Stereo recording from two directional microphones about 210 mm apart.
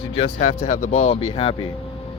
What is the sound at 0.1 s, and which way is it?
Speech, 30° left (ahead or behind).